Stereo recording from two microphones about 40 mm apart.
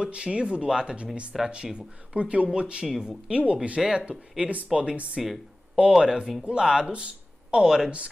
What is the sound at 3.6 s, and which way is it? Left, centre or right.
Speech, right.